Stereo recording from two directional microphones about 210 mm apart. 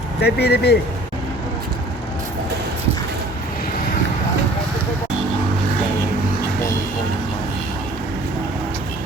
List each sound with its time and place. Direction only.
0.2 s speech: 50° left (ahead or behind)